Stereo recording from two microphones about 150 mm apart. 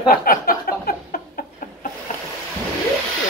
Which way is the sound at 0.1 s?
75° left (ahead or behind).